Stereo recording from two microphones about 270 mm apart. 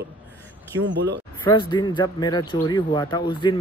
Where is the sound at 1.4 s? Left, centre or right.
Centre.